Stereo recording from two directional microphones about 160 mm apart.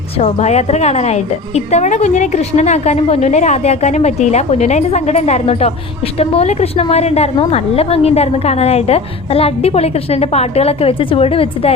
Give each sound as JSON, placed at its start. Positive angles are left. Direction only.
{"t": 0.2, "sound": "a woman's voice", "side_deg": 45}